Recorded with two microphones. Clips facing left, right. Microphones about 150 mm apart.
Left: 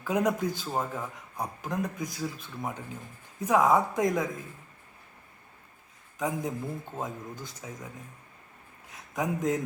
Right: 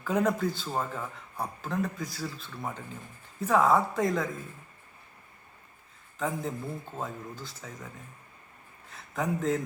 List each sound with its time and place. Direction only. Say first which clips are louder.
0.0 s a man's voice: even; 10° left (ahead or behind)
6.1 s a man's voice: left 1 dB; 10° left (ahead or behind)
8.9 s speech: even; 15° left (ahead or behind)